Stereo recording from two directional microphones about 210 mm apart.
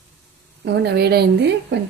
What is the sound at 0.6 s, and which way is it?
A woman's voice, 50° right (ahead or behind).